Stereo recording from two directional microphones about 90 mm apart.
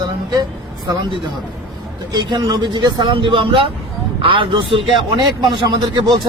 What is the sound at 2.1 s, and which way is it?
Speech, 50° right (ahead or behind).